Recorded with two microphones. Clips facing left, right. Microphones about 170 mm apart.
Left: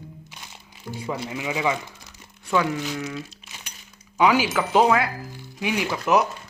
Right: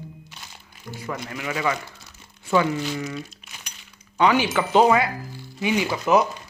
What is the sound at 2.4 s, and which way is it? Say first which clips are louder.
Speech: right 2 dB; centre (ahead or behind).